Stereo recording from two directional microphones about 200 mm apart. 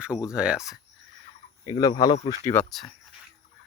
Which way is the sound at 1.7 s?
20° left (ahead or behind).